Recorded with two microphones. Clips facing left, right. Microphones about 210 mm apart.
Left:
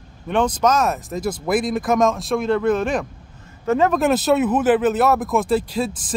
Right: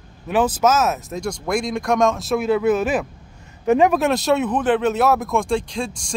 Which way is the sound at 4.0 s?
Centre (ahead or behind).